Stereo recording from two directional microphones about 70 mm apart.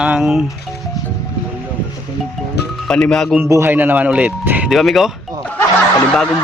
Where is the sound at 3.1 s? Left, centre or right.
Centre.